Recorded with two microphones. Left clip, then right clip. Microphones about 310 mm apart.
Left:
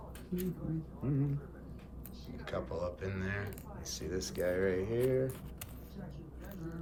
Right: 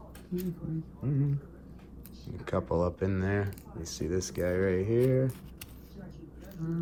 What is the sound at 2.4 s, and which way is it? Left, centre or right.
Speech, centre.